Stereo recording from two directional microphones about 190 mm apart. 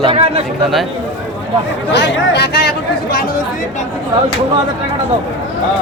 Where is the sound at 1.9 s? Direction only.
60° left (ahead or behind).